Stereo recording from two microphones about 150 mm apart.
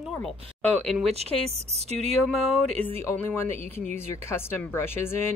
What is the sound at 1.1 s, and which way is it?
Speech, 45° right (ahead or behind).